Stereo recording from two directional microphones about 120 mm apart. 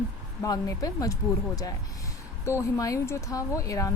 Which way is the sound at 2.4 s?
25° left (ahead or behind).